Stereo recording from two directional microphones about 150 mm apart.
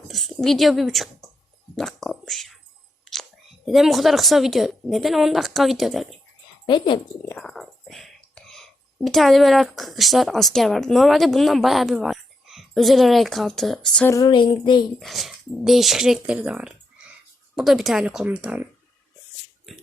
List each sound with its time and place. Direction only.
0.1 s a woman's voice: centre (ahead or behind)
1.7 s a sound: centre (ahead or behind)
3.0 s whispering: centre (ahead or behind)
3.7 s a woman's voice: centre (ahead or behind)
6.7 s speech: 30° left (ahead or behind)
7.3 s speech: 5° left (ahead or behind)
14.1 s a sound: 30° left (ahead or behind)
14.9 s a woman's voice: centre (ahead or behind)